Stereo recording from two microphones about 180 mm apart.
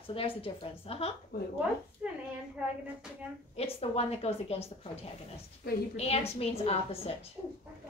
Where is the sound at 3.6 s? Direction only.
35° left (ahead or behind).